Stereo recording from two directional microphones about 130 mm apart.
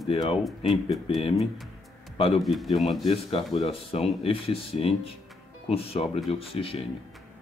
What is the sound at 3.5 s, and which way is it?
Speech, 50° left (ahead or behind).